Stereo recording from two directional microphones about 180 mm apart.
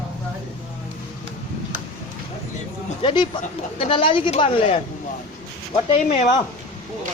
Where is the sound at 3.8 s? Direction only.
30° left (ahead or behind).